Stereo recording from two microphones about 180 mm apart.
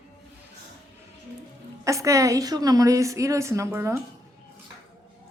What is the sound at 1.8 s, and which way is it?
A woman's voice, 15° right (ahead or behind).